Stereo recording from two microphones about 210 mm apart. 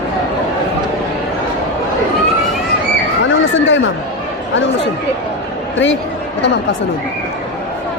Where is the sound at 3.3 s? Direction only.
65° left (ahead or behind).